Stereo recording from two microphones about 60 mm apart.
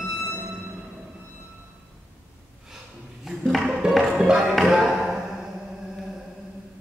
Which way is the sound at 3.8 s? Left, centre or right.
Centre.